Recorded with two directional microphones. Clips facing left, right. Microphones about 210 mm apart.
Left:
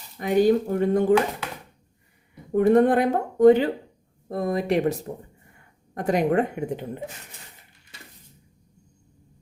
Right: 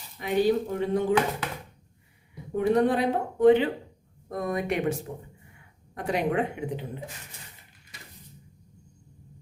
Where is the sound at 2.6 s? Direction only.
50° left (ahead or behind).